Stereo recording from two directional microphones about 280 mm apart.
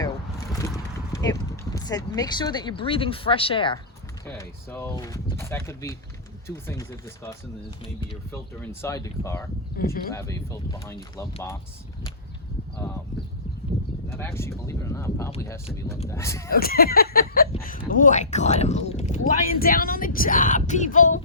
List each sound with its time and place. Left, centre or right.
1.2 s speech: centre
4.3 s speech: centre
8.6 s speech: centre
9.7 s speech: left
10.1 s speech: centre
14.1 s speech: centre
16.5 s speech: left